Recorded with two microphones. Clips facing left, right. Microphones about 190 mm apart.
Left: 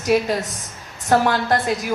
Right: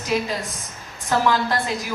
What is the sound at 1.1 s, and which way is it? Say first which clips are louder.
Speech: left 3 dB; 50° left (ahead or behind).